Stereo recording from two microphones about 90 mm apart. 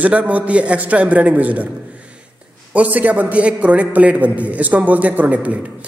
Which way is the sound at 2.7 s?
15° right (ahead or behind).